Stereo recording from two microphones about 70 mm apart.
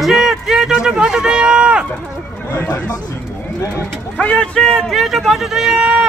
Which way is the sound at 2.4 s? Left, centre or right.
Left.